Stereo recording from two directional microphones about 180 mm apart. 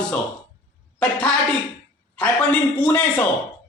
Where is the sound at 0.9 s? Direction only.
5° left (ahead or behind).